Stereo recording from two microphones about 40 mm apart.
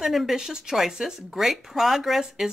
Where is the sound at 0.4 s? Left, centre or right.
Centre.